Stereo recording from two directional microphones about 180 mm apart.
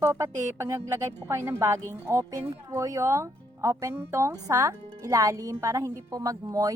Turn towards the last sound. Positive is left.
turn(degrees=-20)  # may be behind; listen again after turning